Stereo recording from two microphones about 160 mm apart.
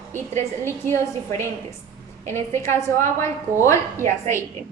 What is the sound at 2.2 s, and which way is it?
A woman's voice, 15° left (ahead or behind).